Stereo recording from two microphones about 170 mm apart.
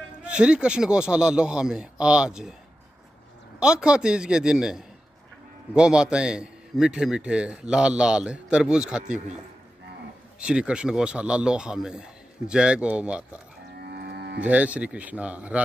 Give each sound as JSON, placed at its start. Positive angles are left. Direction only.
{"t": 0.2, "sound": "a man's voice", "side_deg": -5}
{"t": 3.5, "sound": "a man's voice", "side_deg": -5}
{"t": 10.4, "sound": "a man's voice", "side_deg": -5}
{"t": 13.7, "sound": "livestock", "side_deg": -70}
{"t": 14.4, "sound": "a man's voice", "side_deg": -10}